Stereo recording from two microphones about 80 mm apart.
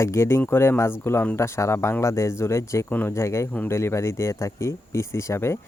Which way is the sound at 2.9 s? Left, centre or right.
Left.